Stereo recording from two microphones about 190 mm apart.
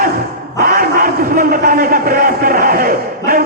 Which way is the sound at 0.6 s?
50° right (ahead or behind).